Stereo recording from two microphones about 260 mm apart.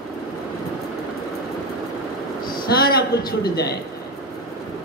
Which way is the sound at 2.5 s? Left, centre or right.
Left.